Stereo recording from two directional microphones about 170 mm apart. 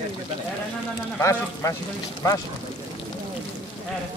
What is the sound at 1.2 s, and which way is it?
Speech, 15° left (ahead or behind).